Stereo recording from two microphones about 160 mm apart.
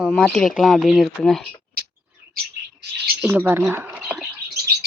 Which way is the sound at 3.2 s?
10° right (ahead or behind).